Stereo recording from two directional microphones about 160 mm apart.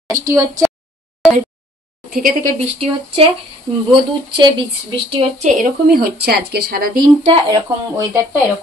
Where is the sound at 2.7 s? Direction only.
35° right (ahead or behind).